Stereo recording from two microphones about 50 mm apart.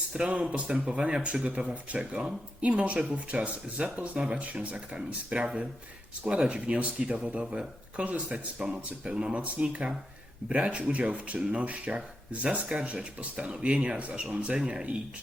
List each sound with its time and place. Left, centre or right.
0.1 s speech: centre
8.5 s speech: centre